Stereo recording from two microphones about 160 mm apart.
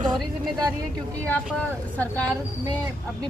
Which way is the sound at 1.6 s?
10° left (ahead or behind).